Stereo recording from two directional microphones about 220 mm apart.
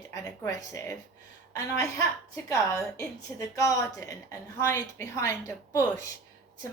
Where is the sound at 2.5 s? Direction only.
15° left (ahead or behind).